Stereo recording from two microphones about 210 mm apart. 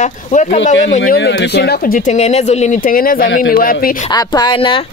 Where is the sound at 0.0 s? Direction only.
35° left (ahead or behind).